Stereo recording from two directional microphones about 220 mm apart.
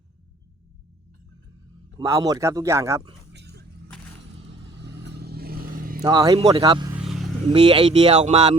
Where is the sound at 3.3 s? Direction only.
50° right (ahead or behind).